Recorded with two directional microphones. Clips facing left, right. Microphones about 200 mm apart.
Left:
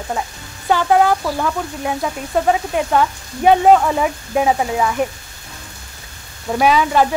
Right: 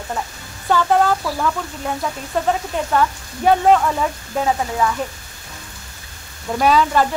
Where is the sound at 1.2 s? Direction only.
25° left (ahead or behind).